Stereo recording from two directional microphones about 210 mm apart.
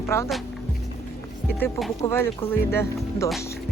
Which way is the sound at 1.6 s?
Centre (ahead or behind).